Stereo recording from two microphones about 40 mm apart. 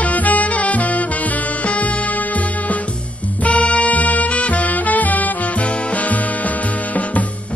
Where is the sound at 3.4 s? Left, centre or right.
Left.